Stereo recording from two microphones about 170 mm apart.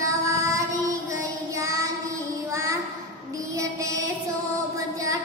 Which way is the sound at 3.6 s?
20° right (ahead or behind).